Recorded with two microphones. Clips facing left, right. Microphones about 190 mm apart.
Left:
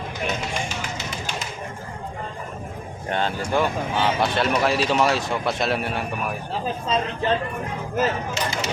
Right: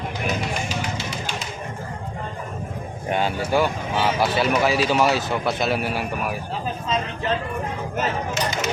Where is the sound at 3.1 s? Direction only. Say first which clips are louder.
Right 2 dB; 5° right (ahead or behind).